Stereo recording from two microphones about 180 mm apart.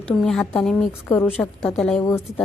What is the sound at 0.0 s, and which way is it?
A woman's voice, 5° left (ahead or behind).